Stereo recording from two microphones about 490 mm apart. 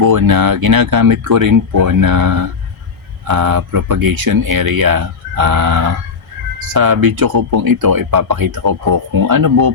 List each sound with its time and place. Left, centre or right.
0.0 s speech: right